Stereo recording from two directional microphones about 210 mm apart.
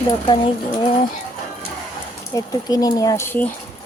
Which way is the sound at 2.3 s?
20° left (ahead or behind).